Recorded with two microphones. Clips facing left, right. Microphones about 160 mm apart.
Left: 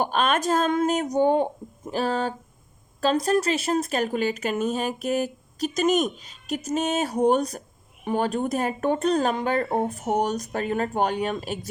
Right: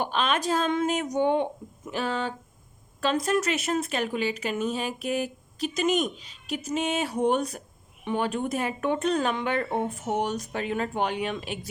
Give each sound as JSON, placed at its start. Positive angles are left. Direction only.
{"t": 0.0, "sound": "speech", "side_deg": 45}